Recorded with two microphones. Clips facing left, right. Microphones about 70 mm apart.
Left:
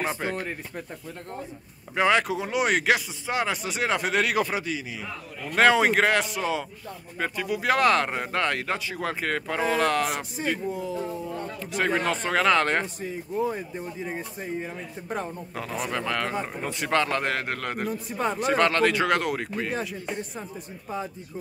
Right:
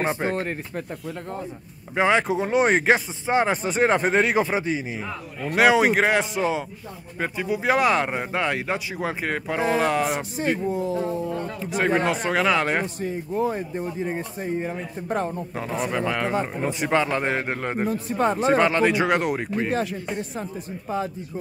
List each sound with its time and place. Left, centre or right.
0.0 s speech: right
2.0 s speech: right
5.6 s speech: centre
7.2 s speech: centre
10.8 s speech: right
11.8 s speech: centre
14.6 s a man's voice: right
15.8 s speech: centre
18.0 s a man's voice: right
18.6 s speech: centre